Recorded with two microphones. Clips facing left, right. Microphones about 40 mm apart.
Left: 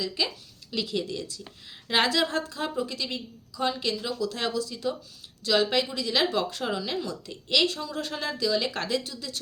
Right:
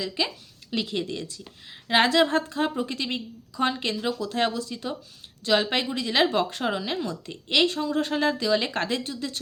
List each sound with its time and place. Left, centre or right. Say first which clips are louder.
0.2 s a woman's voice: right 2 dB; right